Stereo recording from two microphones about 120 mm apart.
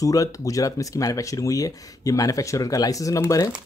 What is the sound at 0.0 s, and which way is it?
Speech, 30° left (ahead or behind).